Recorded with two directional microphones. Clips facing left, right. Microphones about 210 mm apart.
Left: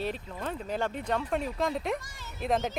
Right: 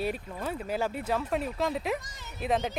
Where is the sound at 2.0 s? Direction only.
20° right (ahead or behind).